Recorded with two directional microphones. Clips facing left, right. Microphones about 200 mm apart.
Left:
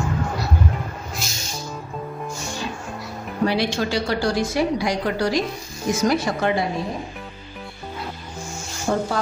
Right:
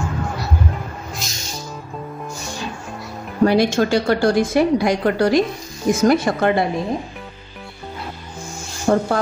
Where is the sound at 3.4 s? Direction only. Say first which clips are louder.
Right 6 dB; 50° right (ahead or behind).